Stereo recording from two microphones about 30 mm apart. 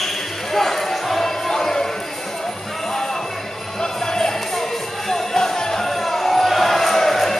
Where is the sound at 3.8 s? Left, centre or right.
Centre.